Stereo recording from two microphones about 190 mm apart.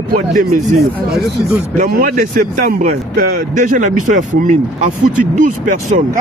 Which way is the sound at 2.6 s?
50° right (ahead or behind).